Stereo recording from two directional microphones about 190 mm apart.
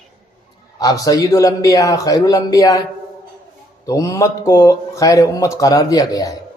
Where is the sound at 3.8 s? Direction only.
15° left (ahead or behind).